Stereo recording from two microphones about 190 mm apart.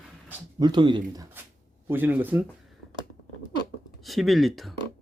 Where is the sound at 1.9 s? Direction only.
10° right (ahead or behind).